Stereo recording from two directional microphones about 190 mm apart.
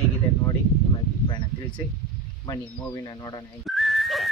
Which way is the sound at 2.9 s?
20° left (ahead or behind).